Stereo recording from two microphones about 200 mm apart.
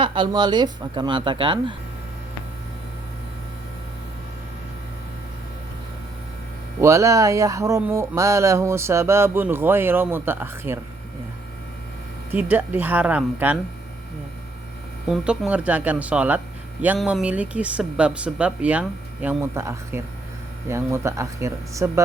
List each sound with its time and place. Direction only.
0.0 s speech: 25° right (ahead or behind)
6.8 s speech: 15° right (ahead or behind)
12.3 s speech: 10° right (ahead or behind)
15.0 s speech: 5° right (ahead or behind)